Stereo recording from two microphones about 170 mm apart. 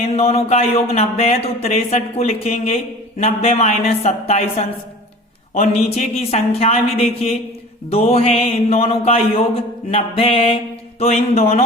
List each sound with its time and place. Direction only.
0.2 s a man's voice: 35° left (ahead or behind)